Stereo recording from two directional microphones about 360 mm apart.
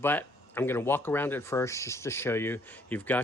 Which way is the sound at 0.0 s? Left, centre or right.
Centre.